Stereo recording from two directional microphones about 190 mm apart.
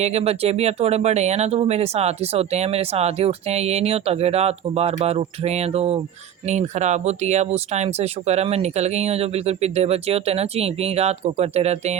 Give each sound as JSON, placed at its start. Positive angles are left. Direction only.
{"t": 0.0, "sound": "speech", "side_deg": -35}